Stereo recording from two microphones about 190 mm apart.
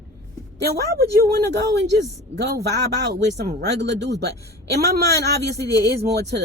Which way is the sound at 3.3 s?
45° right (ahead or behind).